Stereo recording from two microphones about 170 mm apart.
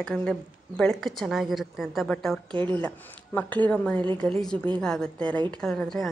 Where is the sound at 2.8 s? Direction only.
10° left (ahead or behind).